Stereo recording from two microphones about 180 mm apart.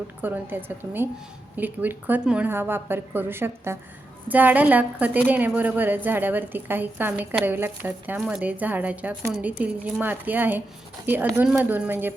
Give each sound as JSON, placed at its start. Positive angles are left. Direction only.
{"t": 0.2, "sound": "a woman's voice", "side_deg": -10}